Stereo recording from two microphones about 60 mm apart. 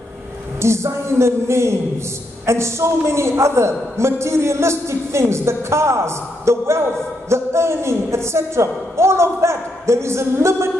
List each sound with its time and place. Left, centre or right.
0.6 s a man's voice: right